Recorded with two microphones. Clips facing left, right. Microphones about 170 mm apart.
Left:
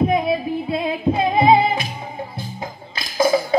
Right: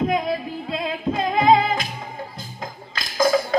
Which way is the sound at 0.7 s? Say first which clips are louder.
Left 3 dB; 10° left (ahead or behind).